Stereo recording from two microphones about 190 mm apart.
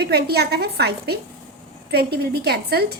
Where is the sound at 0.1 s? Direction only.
55° right (ahead or behind).